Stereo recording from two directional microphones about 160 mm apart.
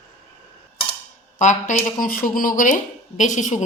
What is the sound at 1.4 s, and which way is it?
Speech, 50° left (ahead or behind).